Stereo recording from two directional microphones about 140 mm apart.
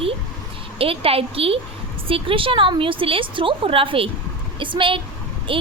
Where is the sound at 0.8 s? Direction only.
40° right (ahead or behind).